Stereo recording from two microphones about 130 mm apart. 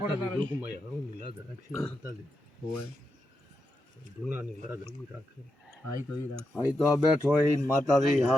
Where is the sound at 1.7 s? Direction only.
20° left (ahead or behind).